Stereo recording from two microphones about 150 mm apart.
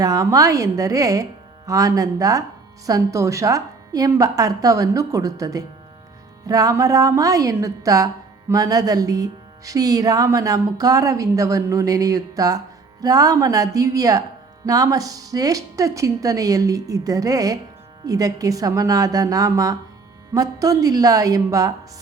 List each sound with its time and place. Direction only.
0.0 s a woman's voice: 25° right (ahead or behind)